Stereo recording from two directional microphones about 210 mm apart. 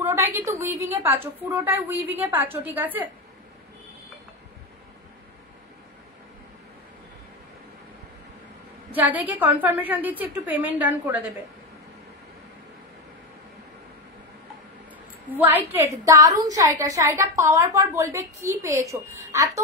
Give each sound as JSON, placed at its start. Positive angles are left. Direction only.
{"t": 0.0, "sound": "a woman's voice", "side_deg": -15}
{"t": 8.9, "sound": "a woman's voice", "side_deg": -10}
{"t": 15.2, "sound": "a woman's voice", "side_deg": -10}